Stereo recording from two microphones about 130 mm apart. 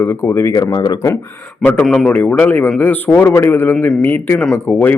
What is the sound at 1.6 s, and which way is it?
A man's voice, 15° left (ahead or behind).